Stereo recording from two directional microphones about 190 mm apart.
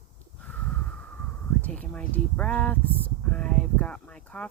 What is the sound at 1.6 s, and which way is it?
Speech, 5° left (ahead or behind).